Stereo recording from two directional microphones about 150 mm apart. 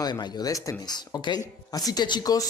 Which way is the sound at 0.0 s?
25° left (ahead or behind).